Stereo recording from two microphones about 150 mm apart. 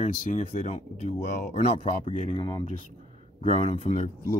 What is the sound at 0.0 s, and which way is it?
Speech, 60° left (ahead or behind).